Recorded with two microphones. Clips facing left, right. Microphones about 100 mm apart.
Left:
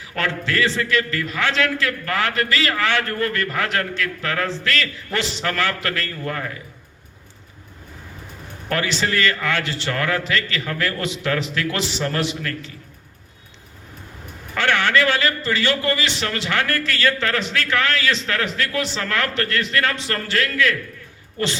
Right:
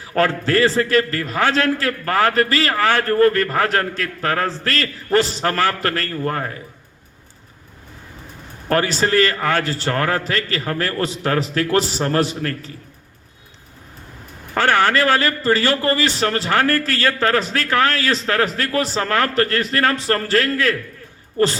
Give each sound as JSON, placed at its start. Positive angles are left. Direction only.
{"t": 0.0, "sound": "a man's voice", "side_deg": -40}
{"t": 8.7, "sound": "a man's voice", "side_deg": -40}
{"t": 14.5, "sound": "a man's voice", "side_deg": -40}